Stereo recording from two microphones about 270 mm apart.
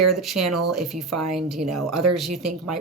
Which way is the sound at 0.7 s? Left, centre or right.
Centre.